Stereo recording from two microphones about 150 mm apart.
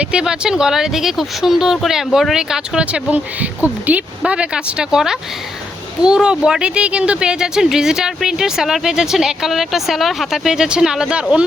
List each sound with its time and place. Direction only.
0.0 s speech: 5° right (ahead or behind)